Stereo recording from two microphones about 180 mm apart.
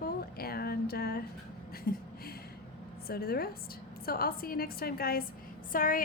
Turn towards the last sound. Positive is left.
turn(degrees=50)  # may be behind; listen again after turning